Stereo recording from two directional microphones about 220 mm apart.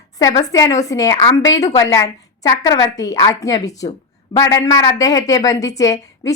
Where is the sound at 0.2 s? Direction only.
15° left (ahead or behind).